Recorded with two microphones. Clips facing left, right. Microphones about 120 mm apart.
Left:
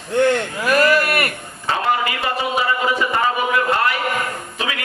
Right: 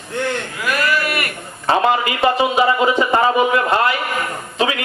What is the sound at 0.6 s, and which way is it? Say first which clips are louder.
Speech: left 4 dB; 35° left (ahead or behind).